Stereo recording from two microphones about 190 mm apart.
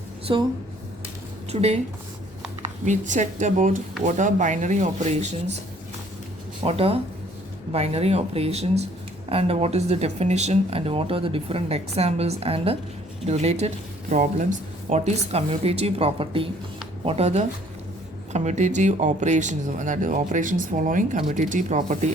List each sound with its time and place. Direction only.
0.3 s speech: 25° right (ahead or behind)
1.5 s speech: 35° right (ahead or behind)
2.6 s a sound: 40° right (ahead or behind)
3.1 s speech: 40° right (ahead or behind)
6.7 s speech: 30° right (ahead or behind)